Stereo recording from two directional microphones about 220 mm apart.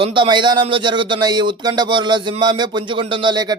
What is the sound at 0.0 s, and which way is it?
A man's voice, 20° right (ahead or behind).